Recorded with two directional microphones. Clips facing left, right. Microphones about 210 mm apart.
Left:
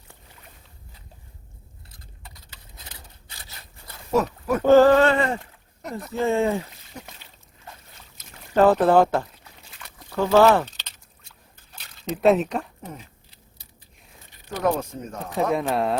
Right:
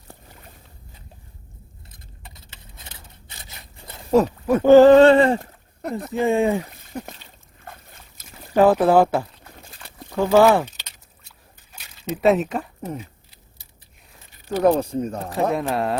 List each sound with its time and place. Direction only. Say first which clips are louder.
1.9 s a sound: right 1 dB; 25° right (ahead or behind)
4.1 s speech: right 5 dB; 30° right (ahead or behind)
4.6 s speech: right 4 dB; 15° right (ahead or behind)
4.9 s speech: right 7 dB; 30° right (ahead or behind)
6.1 s speech: right 2 dB; 15° right (ahead or behind)
6.6 s a sound: right 5 dB; 55° right (ahead or behind)
7.7 s boat: right 3 dB; 55° right (ahead or behind)
8.2 s speech: right 2 dB; 10° right (ahead or behind)
9.4 s a sound: right 6 dB; 50° right (ahead or behind)
10.1 s speech: right 2 dB; 15° right (ahead or behind)
14.5 s speech: right 6 dB; 35° right (ahead or behind)
15.3 s speech: left 1 dB; centre (ahead or behind)